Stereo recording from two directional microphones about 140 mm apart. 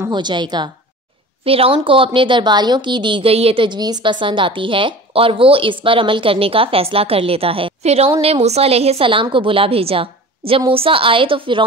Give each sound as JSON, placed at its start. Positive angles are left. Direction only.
{"t": 0.1, "sound": "a woman's voice", "side_deg": -30}